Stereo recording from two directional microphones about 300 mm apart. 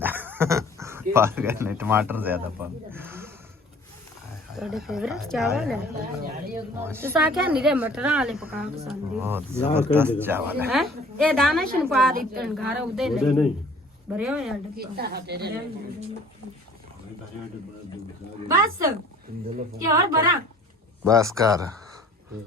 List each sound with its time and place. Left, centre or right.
0.0 s dog: centre
1.1 s speech: centre
4.5 s speech: centre
6.8 s speech: centre
14.8 s a woman's voice: right
18.4 s speech: centre